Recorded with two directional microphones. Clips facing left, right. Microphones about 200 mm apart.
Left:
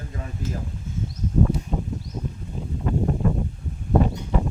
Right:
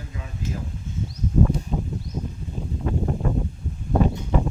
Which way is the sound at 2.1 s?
10° right (ahead or behind).